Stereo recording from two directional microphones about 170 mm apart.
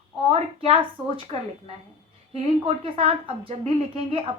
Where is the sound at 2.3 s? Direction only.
35° right (ahead or behind).